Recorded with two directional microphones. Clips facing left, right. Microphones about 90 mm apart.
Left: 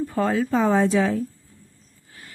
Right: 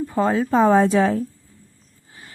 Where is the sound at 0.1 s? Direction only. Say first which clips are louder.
Right 4 dB; 25° right (ahead or behind); by 1.2 s 45° right (ahead or behind).